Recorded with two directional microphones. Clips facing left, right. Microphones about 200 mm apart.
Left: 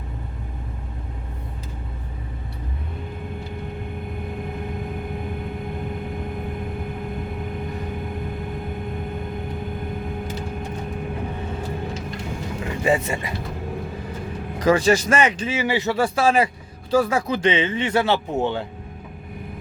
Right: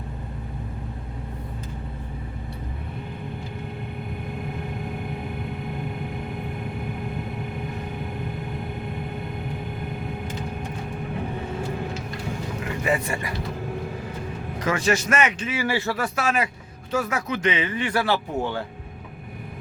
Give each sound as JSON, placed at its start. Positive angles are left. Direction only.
{"t": 12.8, "sound": "speech", "side_deg": 25}
{"t": 14.6, "sound": "a man's voice", "side_deg": 35}